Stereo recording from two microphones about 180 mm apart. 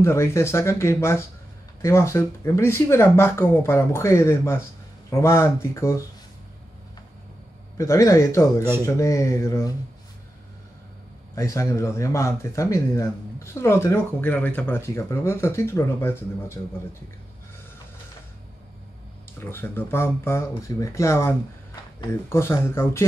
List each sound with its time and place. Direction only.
0.0 s speech: 15° left (ahead or behind)
7.7 s speech: 15° left (ahead or behind)
11.3 s speech: 15° left (ahead or behind)
19.4 s speech: 10° left (ahead or behind)